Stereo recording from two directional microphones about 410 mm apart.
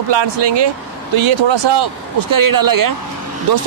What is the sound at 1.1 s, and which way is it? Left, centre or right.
Speech, right.